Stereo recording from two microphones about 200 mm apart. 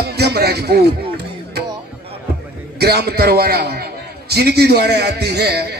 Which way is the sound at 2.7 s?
50° right (ahead or behind).